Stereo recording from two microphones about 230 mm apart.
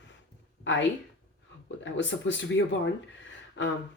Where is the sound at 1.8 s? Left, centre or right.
Left.